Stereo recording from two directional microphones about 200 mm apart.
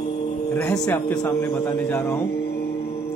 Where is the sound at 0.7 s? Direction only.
15° left (ahead or behind).